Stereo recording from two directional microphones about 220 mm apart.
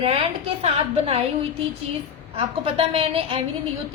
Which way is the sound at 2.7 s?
25° right (ahead or behind).